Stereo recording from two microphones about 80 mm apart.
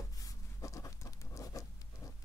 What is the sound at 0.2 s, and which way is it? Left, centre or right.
Writing, left.